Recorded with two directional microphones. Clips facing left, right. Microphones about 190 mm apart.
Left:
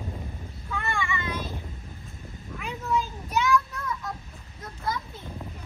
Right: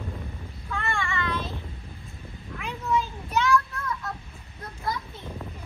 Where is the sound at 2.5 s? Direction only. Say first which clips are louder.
Right 1 dB; 5° left (ahead or behind).